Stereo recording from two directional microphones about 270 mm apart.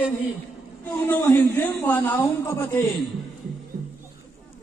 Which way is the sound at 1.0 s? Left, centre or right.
Centre.